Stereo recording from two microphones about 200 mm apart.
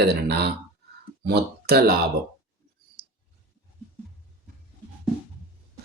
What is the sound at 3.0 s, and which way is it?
Clicking, 50° right (ahead or behind).